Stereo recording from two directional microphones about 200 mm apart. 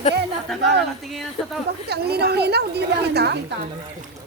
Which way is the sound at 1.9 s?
55° right (ahead or behind).